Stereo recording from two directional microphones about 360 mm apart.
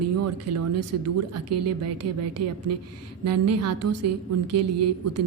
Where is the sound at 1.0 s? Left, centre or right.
Right.